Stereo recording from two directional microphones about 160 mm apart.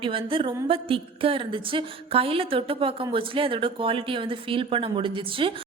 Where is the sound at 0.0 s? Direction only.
35° right (ahead or behind).